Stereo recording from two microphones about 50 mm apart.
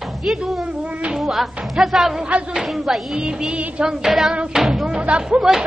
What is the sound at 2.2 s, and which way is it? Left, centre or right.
Speech, right.